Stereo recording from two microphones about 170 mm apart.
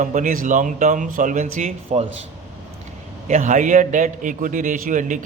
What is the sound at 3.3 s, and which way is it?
A man's voice, 45° right (ahead or behind).